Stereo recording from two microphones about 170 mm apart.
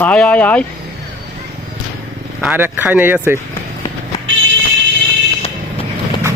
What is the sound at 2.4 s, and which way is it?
Speech, 10° right (ahead or behind).